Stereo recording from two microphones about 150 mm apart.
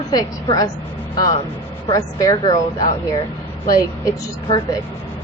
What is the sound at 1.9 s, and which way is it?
Speech, 25° left (ahead or behind).